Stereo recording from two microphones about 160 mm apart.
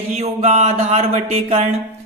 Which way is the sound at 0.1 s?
40° right (ahead or behind).